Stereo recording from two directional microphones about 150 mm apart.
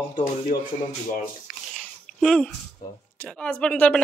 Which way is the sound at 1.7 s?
5° left (ahead or behind).